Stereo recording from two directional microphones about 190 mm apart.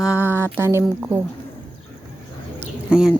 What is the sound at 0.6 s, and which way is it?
Speech, 15° right (ahead or behind).